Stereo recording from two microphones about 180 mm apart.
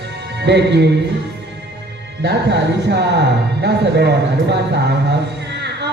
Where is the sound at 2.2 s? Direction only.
70° right (ahead or behind).